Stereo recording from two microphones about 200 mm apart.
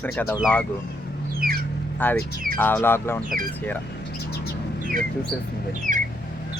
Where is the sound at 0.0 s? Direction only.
10° left (ahead or behind).